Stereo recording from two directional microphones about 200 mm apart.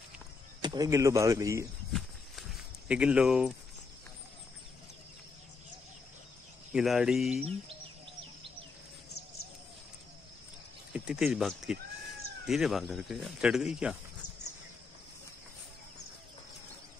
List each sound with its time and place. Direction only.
0.6 s speech: 20° right (ahead or behind)
1.9 s walk: centre (ahead or behind)
2.9 s speech: 5° right (ahead or behind)
6.7 s speech: centre (ahead or behind)
10.9 s speech: 5° right (ahead or behind)